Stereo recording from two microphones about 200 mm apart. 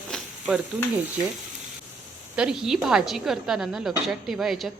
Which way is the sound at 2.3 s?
5° right (ahead or behind).